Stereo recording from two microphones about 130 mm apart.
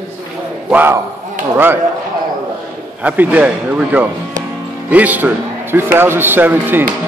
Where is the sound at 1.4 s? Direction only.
90° right.